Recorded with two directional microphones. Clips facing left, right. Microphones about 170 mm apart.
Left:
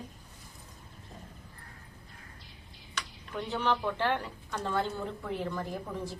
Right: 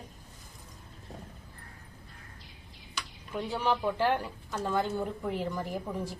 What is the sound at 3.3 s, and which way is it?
A woman's voice, 10° right (ahead or behind).